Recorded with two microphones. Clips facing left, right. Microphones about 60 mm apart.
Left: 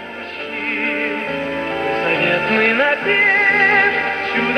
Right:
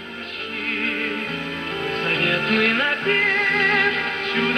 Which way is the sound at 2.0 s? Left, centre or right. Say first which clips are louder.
Left 3 dB; left.